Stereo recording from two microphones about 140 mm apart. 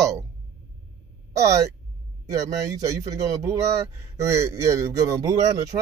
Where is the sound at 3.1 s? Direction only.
25° right (ahead or behind).